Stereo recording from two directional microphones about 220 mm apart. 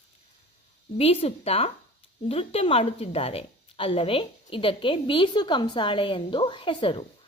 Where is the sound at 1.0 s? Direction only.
25° left (ahead or behind).